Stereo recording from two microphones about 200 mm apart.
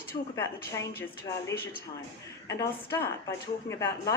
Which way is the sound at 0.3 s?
15° left (ahead or behind).